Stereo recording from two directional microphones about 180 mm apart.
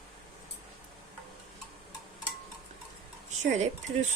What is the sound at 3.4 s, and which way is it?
Speech, 40° right (ahead or behind).